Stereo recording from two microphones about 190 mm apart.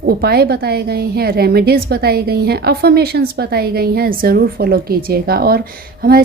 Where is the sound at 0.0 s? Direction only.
55° right (ahead or behind).